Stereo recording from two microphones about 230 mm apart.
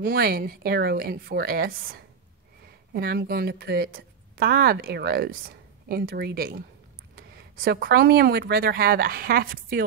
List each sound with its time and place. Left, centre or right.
0.0 s speech: right